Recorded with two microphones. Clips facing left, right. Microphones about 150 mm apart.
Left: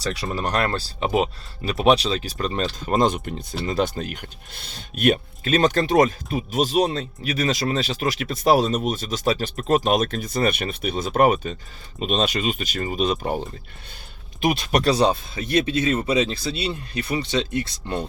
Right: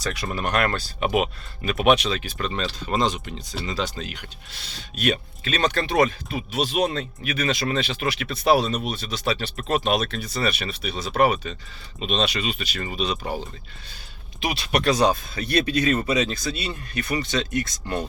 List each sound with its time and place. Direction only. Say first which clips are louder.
0.0 s speech: left 2 dB; 30° left (ahead or behind); by 13.4 s 50° left (ahead or behind)
14.4 s speech: left 3 dB; 45° left (ahead or behind); by 18.0 s 25° left (ahead or behind)